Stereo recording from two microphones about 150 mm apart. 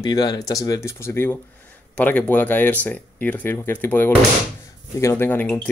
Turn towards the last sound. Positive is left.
turn(degrees=10)  # may be behind; listen again after turning